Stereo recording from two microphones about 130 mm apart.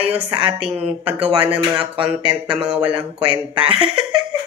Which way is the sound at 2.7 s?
10° right (ahead or behind).